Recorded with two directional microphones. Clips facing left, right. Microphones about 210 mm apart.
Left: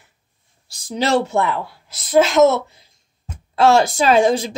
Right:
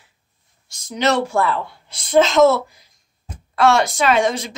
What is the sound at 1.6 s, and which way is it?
A woman's voice, 5° left (ahead or behind).